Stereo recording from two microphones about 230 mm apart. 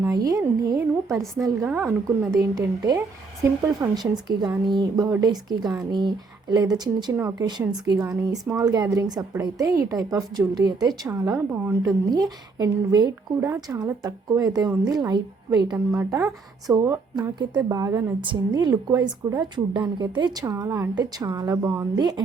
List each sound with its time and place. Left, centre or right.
0.3 s a woman's voice: centre